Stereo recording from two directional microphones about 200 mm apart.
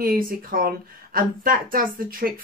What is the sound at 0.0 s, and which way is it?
Speech, 45° right (ahead or behind).